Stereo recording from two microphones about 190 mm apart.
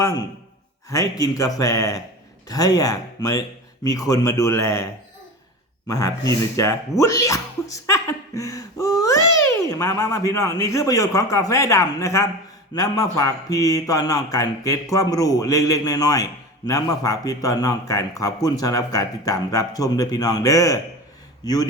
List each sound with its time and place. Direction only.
0.9 s speech: 20° left (ahead or behind)
5.9 s speech: 20° left (ahead or behind)